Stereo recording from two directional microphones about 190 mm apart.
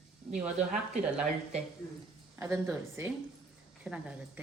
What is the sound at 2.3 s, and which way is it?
A woman's voice, 15° right (ahead or behind).